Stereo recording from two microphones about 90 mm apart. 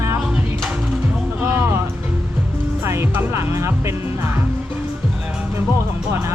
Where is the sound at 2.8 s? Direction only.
30° right (ahead or behind).